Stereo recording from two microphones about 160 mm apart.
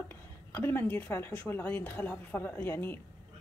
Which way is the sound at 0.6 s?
15° left (ahead or behind).